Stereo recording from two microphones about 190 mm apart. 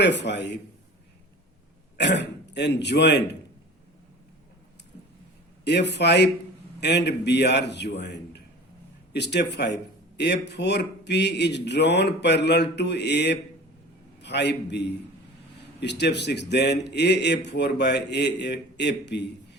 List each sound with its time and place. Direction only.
0.0 s speech: 65° left (ahead or behind)
2.0 s speech: 65° left (ahead or behind)
5.6 s a man's voice: 65° left (ahead or behind)